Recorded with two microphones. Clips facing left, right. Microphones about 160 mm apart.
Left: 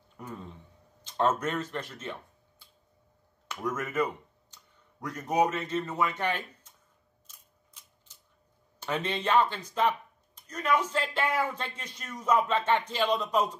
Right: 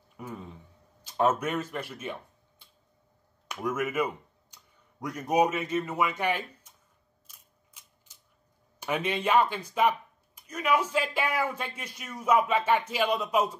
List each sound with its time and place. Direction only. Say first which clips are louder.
0.2 s speech: right 1 dB; 10° right (ahead or behind)
3.4 s speech: right 3 dB; 10° right (ahead or behind)
8.7 s speech: right 2 dB; 10° right (ahead or behind)